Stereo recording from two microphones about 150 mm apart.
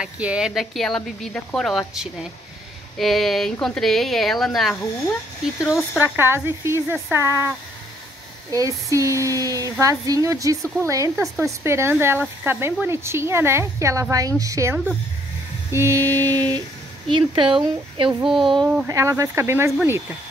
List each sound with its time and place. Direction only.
0.0 s a woman's voice: 5° right (ahead or behind); by 17.6 s 35° right (ahead or behind)
18.2 s speech: centre (ahead or behind)
18.9 s speech: 20° right (ahead or behind)